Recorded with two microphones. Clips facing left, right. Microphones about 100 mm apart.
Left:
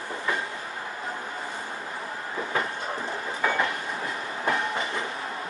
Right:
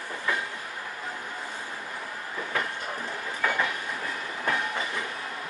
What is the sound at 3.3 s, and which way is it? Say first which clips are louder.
Train: left 2 dB; 25° left (ahead or behind).